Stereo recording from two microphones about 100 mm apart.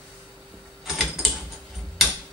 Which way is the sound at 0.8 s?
5° right (ahead or behind).